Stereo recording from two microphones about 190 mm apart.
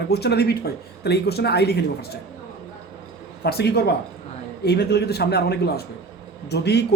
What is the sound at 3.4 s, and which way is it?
A man's voice, 60° left (ahead or behind).